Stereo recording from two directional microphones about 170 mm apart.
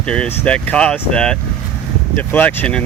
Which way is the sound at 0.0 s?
5° left (ahead or behind).